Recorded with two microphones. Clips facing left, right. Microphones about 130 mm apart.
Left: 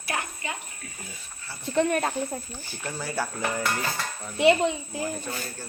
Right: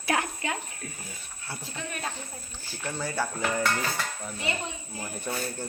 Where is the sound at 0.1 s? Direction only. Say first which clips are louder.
Right 4 dB; 90° right.